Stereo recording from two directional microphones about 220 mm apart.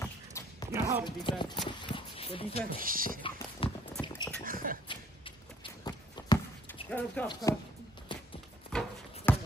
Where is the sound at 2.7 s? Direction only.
40° right (ahead or behind).